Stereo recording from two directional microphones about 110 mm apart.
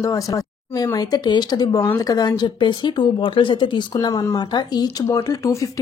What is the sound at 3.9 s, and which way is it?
A woman's voice, 30° left (ahead or behind).